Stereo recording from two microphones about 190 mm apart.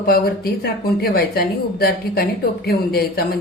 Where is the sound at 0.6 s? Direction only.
55° left (ahead or behind).